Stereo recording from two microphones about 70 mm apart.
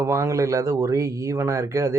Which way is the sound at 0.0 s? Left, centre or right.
Right.